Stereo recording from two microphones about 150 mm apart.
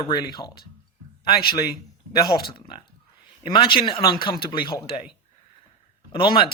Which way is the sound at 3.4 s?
35° left (ahead or behind).